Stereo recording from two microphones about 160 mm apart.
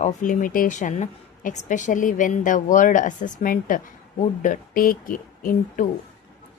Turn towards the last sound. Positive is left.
turn(degrees=55)  # may be behind; listen again after turning